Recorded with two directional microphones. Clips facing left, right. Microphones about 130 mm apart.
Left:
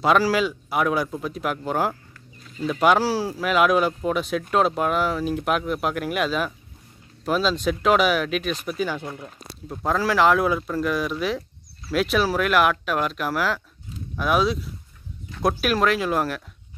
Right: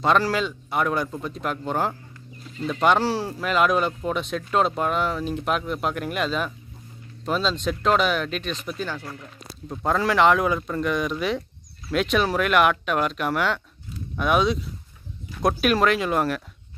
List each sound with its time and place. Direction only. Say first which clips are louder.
0.0 s speech: left 2 dB; 5° left (ahead or behind)